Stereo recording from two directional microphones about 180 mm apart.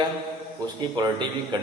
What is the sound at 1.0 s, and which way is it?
Speech, 25° right (ahead or behind).